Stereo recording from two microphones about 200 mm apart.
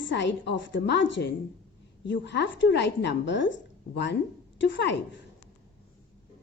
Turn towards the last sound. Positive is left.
turn(degrees=65)  # may be behind; listen again after turning